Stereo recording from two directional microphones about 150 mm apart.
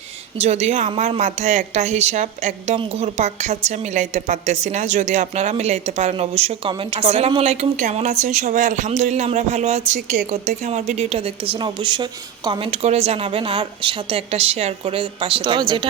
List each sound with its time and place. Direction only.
0.3 s a woman's voice: 45° right (ahead or behind); by 15.9 s 30° right (ahead or behind)